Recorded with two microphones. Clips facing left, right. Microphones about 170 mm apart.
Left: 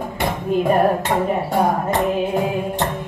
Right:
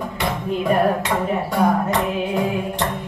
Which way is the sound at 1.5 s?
50° left (ahead or behind).